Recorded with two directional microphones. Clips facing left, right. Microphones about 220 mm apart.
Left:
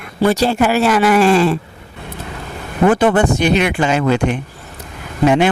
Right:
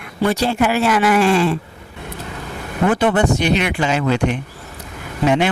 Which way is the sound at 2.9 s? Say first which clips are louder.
Left 2 dB; 50° left (ahead or behind).